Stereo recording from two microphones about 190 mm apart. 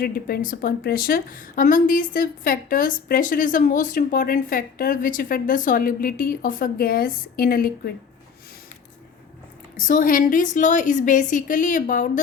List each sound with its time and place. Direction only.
0.0 s a woman's voice: 50° left (ahead or behind)
9.7 s a woman's voice: 45° left (ahead or behind)